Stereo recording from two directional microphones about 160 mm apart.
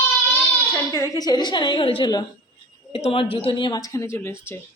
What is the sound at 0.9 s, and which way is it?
A woman's voice, 20° left (ahead or behind).